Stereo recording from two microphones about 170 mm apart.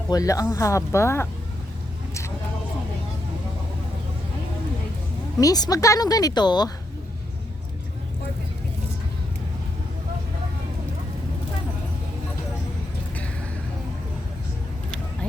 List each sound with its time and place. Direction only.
0.1 s speech: 20° left (ahead or behind)
5.4 s speech: 20° left (ahead or behind)
14.8 s vehicle: 5° left (ahead or behind)